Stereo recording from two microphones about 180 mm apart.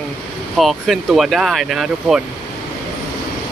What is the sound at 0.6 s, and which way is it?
Speech, centre (ahead or behind).